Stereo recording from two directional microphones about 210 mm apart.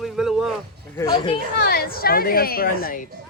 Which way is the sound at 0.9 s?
20° left (ahead or behind).